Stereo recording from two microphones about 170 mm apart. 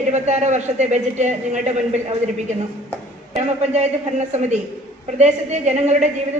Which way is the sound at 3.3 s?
40° right (ahead or behind).